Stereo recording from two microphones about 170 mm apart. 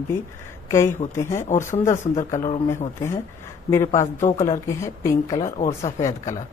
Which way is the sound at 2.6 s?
15° left (ahead or behind).